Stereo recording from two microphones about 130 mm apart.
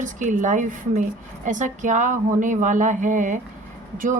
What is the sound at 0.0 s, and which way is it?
Speech, 75° right (ahead or behind).